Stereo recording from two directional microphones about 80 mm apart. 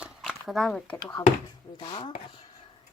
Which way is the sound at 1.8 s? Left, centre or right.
Left.